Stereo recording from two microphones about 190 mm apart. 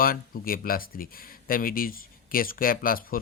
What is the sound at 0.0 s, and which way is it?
Speech, 50° left (ahead or behind).